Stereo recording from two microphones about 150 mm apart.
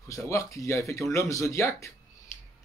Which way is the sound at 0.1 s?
20° left (ahead or behind).